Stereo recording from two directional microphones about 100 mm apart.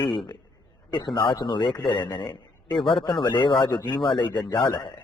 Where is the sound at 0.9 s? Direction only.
55° left (ahead or behind).